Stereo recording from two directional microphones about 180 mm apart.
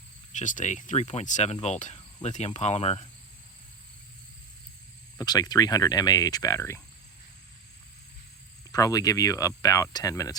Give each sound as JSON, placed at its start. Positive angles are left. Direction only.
{"t": 0.3, "sound": "speech", "side_deg": 45}
{"t": 5.1, "sound": "speech", "side_deg": 20}
{"t": 8.7, "sound": "speech", "side_deg": 20}